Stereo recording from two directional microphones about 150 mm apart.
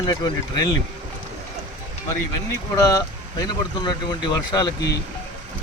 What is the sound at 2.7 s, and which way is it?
Speech, 25° left (ahead or behind).